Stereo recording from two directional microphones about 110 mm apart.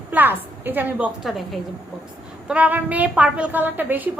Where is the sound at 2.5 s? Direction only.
15° right (ahead or behind).